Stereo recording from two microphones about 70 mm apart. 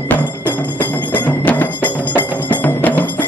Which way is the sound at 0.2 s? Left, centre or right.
Left.